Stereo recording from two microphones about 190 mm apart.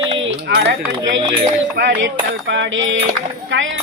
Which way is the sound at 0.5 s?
70° right (ahead or behind).